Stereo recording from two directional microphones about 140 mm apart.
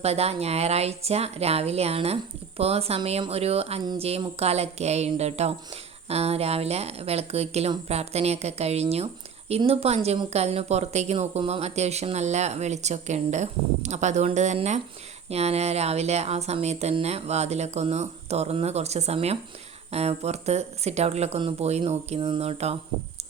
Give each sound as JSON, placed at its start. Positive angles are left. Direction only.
{"t": 0.0, "sound": "speech", "side_deg": -50}